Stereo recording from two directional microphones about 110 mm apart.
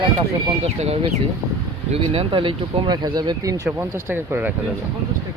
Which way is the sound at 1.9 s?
60° right (ahead or behind).